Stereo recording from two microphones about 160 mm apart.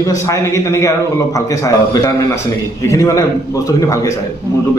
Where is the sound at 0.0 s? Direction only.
20° left (ahead or behind).